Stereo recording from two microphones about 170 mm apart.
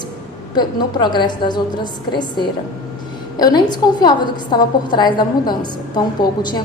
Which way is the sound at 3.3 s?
25° left (ahead or behind).